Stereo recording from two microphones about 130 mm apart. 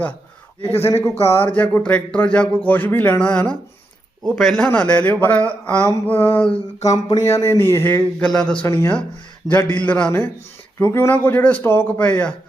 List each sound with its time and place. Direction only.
0.8 s speech: 20° left (ahead or behind)
6.8 s speech: 30° left (ahead or behind)
8.2 s speech: 5° left (ahead or behind)
8.6 s speech: 20° left (ahead or behind)